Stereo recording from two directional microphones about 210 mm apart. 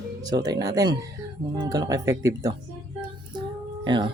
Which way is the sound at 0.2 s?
20° right (ahead or behind).